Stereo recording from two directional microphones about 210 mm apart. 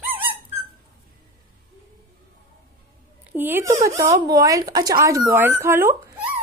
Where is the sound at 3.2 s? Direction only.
10° right (ahead or behind).